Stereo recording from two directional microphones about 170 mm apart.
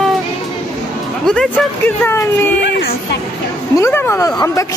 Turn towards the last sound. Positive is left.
turn(degrees=20)  # may be behind; listen again after turning